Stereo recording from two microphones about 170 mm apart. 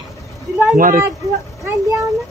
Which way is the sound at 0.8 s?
55° right (ahead or behind).